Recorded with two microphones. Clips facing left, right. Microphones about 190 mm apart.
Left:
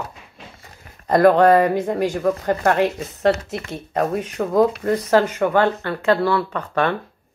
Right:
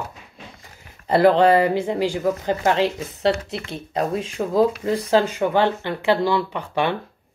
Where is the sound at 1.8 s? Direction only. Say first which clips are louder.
Left 1 dB; 15° right (ahead or behind).